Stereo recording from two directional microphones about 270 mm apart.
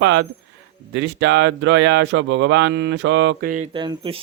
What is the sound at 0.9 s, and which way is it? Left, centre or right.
Speech, right.